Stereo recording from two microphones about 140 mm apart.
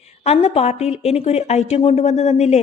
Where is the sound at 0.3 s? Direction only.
50° left (ahead or behind).